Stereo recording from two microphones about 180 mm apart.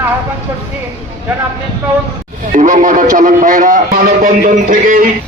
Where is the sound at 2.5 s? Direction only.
45° right (ahead or behind).